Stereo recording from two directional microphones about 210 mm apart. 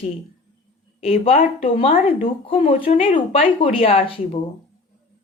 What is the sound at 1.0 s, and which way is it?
Speech, 25° left (ahead or behind).